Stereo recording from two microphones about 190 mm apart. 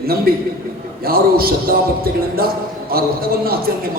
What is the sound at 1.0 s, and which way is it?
A man's voice, 50° right (ahead or behind).